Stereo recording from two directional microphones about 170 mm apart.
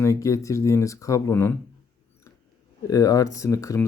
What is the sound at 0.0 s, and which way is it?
Speech, 20° left (ahead or behind).